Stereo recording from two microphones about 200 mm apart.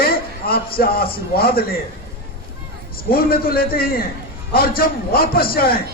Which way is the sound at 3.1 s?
45° left (ahead or behind).